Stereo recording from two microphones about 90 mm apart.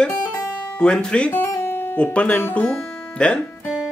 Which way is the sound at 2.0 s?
15° left (ahead or behind).